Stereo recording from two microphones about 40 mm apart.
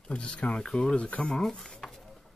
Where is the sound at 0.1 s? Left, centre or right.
Left.